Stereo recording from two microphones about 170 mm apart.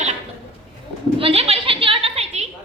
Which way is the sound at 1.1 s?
35° right (ahead or behind).